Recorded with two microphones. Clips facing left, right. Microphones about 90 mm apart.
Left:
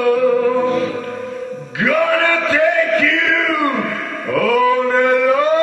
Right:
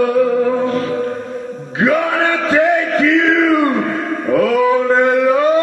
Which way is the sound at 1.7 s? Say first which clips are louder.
Right 1 dB; 30° right (ahead or behind).